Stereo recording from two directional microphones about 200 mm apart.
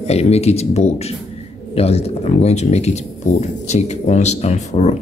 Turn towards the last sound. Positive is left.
turn(degrees=35)  # may be behind; listen again after turning